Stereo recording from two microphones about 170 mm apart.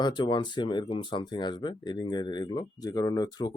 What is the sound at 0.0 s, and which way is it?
Speech, 30° left (ahead or behind).